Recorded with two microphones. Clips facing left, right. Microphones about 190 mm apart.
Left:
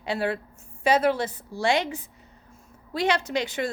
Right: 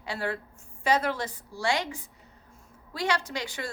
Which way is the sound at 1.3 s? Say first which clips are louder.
Left 5 dB; 15° right (ahead or behind).